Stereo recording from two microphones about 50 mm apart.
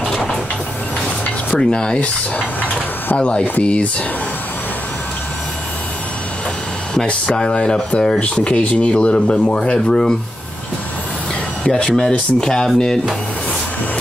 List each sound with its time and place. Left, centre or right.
0.1 s vehicle: centre
1.6 s speech: centre
6.9 s speech: centre
8.2 s speech: left
11.6 s speech: centre